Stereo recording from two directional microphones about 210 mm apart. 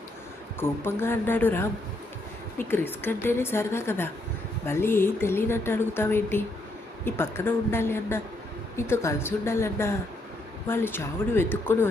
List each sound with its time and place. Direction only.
0.6 s speech: 10° left (ahead or behind)